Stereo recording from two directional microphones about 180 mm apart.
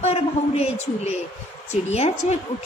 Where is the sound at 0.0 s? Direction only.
35° left (ahead or behind).